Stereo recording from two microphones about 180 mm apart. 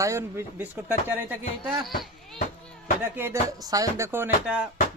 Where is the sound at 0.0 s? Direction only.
15° right (ahead or behind).